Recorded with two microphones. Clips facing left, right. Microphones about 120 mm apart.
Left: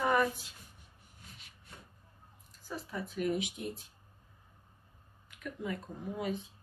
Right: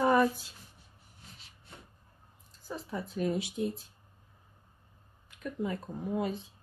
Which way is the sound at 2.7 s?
30° right (ahead or behind).